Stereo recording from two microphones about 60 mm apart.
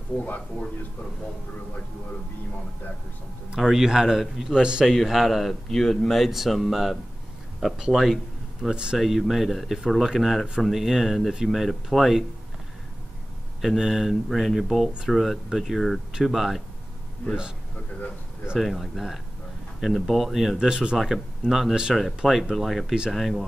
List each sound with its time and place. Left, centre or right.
0.2 s speech: left
3.5 s speech: centre
4.9 s speech: centre
8.9 s speech: centre
13.6 s speech: centre
18.6 s speech: centre
20.5 s speech: centre